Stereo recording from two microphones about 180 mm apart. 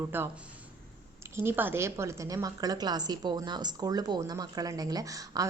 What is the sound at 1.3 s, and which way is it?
A woman's voice, 10° right (ahead or behind).